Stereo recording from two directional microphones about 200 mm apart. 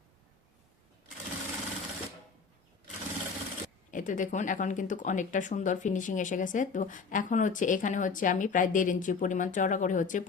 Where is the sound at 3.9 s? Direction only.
40° left (ahead or behind).